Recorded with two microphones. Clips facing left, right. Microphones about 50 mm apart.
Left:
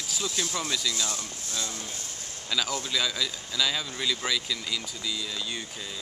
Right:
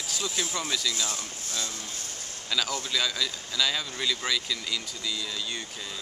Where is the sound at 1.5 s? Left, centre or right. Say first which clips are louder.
Left 1 dB; left.